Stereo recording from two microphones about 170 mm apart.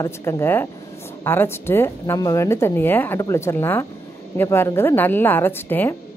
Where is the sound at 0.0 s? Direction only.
15° left (ahead or behind).